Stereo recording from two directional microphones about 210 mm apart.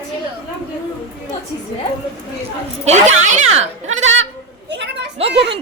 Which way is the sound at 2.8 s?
30° right (ahead or behind).